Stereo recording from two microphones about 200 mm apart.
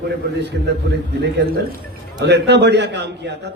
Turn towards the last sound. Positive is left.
turn(degrees=-55)  # may be behind; listen again after turning